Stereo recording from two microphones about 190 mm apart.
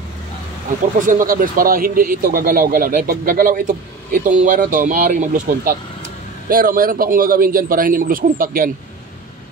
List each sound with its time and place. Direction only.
1.0 s a man's voice: 45° right (ahead or behind)